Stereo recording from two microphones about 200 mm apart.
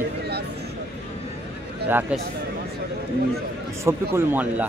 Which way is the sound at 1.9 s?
10° right (ahead or behind).